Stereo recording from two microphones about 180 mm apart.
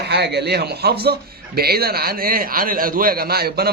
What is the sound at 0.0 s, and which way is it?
A man's voice, 65° right (ahead or behind).